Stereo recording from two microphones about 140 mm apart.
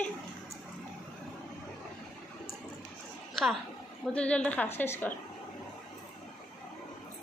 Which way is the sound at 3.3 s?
Centre (ahead or behind).